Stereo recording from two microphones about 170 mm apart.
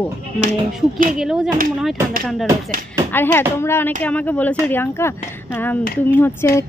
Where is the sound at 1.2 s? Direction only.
5° right (ahead or behind).